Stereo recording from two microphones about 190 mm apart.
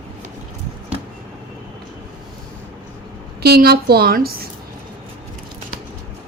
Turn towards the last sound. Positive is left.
turn(degrees=-50)  # may be behind; listen again after turning